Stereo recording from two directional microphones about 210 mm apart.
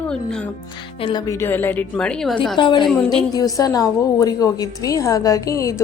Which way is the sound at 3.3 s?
15° left (ahead or behind).